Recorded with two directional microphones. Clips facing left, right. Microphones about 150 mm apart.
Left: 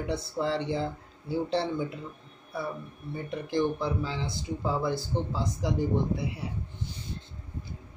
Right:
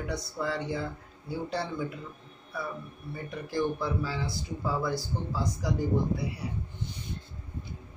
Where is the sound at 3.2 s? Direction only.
20° left (ahead or behind).